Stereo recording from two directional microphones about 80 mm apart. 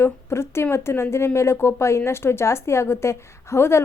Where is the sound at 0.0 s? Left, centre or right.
Left.